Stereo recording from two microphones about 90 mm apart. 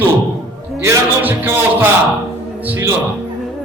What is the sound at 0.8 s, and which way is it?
A man's voice, 25° right (ahead or behind).